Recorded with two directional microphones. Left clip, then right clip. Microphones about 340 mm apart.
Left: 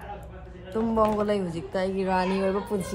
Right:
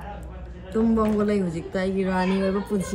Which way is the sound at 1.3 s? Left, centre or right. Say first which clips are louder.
Right 2 dB; centre.